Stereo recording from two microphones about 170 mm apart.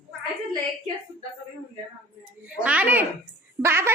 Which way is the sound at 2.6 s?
10° right (ahead or behind).